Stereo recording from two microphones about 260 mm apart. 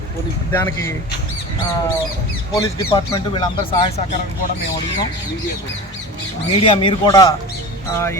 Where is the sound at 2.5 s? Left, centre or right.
Centre.